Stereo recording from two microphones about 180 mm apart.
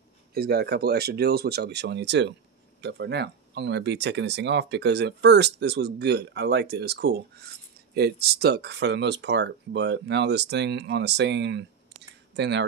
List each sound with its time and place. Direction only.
0.3 s speech: 60° right (ahead or behind); by 12.6 s 75° right (ahead or behind)